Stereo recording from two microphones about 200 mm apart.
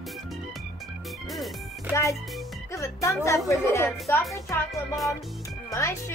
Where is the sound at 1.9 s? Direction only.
15° left (ahead or behind).